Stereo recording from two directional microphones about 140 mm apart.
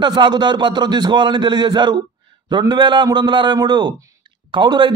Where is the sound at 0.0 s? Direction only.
30° right (ahead or behind).